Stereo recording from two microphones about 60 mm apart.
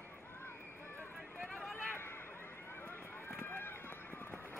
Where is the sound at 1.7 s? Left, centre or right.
Left.